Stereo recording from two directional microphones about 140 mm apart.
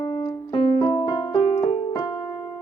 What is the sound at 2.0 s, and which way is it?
Music, 35° left (ahead or behind).